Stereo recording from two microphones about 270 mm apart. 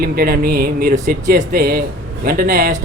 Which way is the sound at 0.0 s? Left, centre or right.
Right.